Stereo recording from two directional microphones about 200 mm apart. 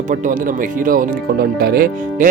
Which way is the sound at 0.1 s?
40° right (ahead or behind).